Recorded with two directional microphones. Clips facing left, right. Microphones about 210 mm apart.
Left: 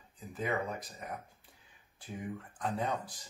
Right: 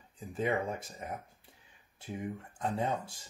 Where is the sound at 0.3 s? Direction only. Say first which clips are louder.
Right 3 dB; 25° right (ahead or behind).